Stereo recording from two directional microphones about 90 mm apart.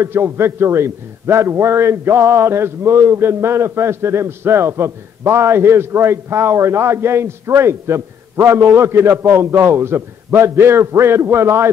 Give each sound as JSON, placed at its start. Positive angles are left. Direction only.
{"t": 0.0, "sound": "a man's voice", "side_deg": -25}